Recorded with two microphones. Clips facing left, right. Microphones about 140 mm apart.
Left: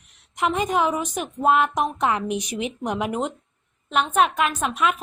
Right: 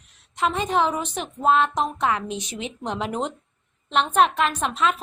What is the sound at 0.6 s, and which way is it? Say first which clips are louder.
A woman's voice: even; 5° left (ahead or behind).